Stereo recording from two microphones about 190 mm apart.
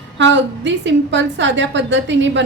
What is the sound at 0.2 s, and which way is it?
A woman's voice, 70° right (ahead or behind).